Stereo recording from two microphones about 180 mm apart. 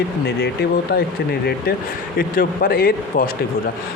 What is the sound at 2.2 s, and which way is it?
Speech, 55° left (ahead or behind).